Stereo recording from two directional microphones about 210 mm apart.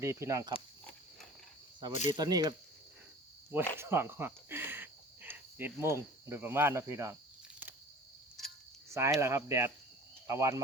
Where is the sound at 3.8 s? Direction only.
10° right (ahead or behind).